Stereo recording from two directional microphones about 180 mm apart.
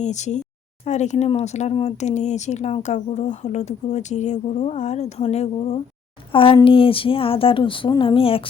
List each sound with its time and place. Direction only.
0.0 s speech: 40° left (ahead or behind)